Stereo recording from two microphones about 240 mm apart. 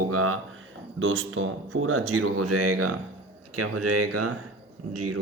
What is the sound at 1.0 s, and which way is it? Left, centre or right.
Speech, right.